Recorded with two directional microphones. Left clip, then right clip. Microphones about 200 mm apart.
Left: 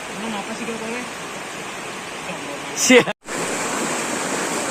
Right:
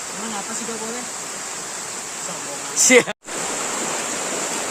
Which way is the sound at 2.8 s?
10° right (ahead or behind).